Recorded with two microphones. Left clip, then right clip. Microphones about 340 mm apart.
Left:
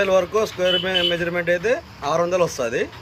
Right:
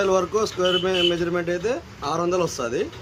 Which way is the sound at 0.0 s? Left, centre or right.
Centre.